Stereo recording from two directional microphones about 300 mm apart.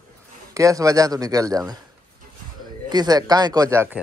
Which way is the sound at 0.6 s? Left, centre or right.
Centre.